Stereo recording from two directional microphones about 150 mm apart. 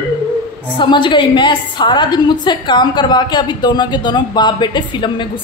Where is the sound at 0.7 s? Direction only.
30° left (ahead or behind).